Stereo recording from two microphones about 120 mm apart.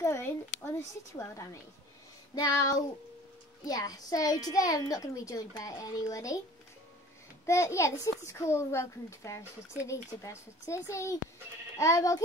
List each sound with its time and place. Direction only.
0.0 s a child's voice: 25° left (ahead or behind)
7.4 s a child's voice: 25° left (ahead or behind)